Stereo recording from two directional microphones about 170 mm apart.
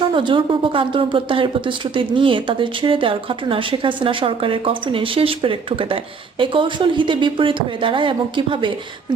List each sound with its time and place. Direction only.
0.1 s speech: 30° right (ahead or behind)